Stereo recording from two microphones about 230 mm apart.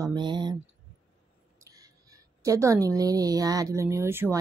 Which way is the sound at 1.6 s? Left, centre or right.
Centre.